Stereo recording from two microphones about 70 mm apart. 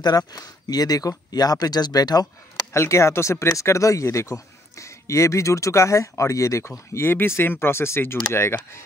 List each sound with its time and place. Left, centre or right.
0.3 s speech: left
2.7 s speech: left
6.9 s speech: left